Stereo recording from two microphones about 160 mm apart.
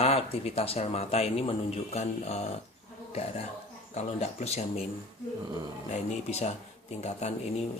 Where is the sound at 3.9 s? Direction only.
45° left (ahead or behind).